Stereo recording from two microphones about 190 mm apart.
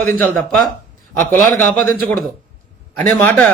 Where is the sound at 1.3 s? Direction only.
10° left (ahead or behind).